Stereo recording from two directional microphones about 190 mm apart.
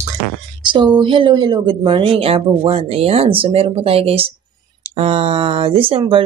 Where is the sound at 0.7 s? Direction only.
25° right (ahead or behind).